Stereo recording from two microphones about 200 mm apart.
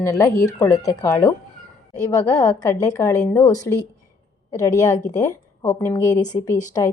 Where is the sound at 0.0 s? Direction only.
15° left (ahead or behind).